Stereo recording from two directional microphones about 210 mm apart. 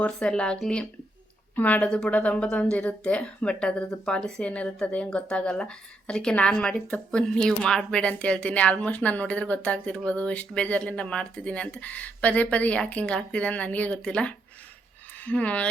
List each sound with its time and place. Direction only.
0.0 s speech: 5° left (ahead or behind)